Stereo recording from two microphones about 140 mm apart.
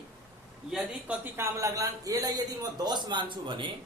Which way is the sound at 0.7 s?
10° right (ahead or behind).